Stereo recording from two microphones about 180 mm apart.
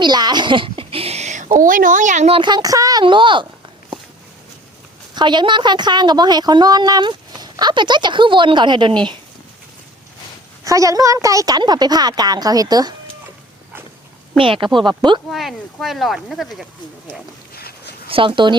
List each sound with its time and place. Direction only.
0.0 s a sound: 25° right (ahead or behind); by 1.5 s 40° right (ahead or behind)
1.5 s a woman's voice: 45° right (ahead or behind); by 3.4 s 25° right (ahead or behind)
5.1 s a woman's voice: 25° right (ahead or behind)
10.6 s a woman's voice: 20° right (ahead or behind)
14.3 s a woman's voice: 30° right (ahead or behind)
15.3 s speech: centre (ahead or behind)
17.5 s a sound: 60° left (ahead or behind)
18.1 s a woman's voice: 30° right (ahead or behind)